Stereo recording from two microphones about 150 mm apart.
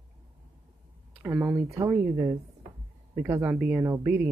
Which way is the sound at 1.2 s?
15° right (ahead or behind).